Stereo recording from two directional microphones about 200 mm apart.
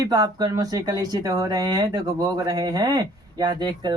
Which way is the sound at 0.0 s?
20° right (ahead or behind).